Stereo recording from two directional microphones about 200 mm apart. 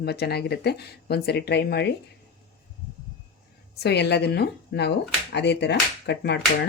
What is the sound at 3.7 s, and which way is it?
Speech, 55° left (ahead or behind).